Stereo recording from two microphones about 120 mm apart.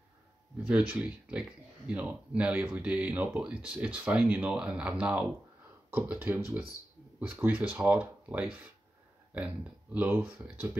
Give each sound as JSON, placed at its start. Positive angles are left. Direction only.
{"t": 0.7, "sound": "speech", "side_deg": -10}
{"t": 9.9, "sound": "speech", "side_deg": -10}